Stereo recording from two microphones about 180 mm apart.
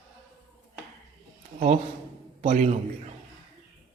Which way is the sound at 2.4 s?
40° right (ahead or behind).